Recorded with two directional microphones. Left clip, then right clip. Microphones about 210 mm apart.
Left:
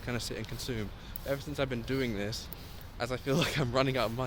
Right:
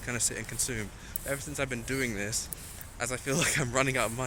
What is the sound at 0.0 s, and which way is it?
Speech, 10° left (ahead or behind).